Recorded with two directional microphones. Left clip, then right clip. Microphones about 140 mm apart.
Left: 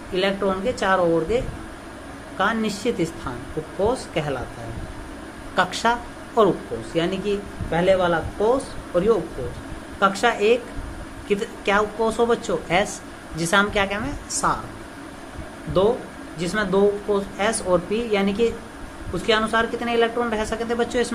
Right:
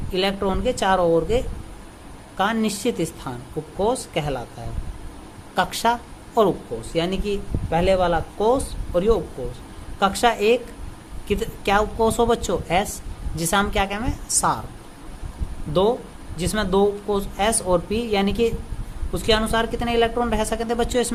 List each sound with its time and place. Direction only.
0.1 s speech: 60° right (ahead or behind)
2.4 s speech: 60° right (ahead or behind)
5.5 s speech: 50° right (ahead or behind)
6.9 s speech: 60° right (ahead or behind)
15.8 s speech: 65° right (ahead or behind)